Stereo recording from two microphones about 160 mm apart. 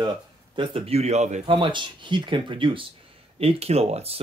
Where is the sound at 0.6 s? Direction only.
35° right (ahead or behind).